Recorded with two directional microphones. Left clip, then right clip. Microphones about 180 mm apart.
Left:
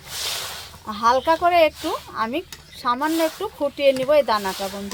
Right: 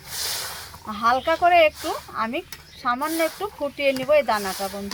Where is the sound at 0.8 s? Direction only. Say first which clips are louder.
Left 3 dB; 90° left.